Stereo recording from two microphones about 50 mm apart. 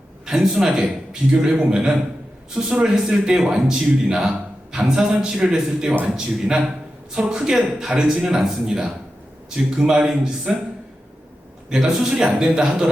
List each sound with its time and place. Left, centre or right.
0.3 s a man's voice: centre
11.7 s a man's voice: centre